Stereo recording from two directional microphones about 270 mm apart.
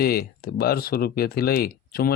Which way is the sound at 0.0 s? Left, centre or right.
Left.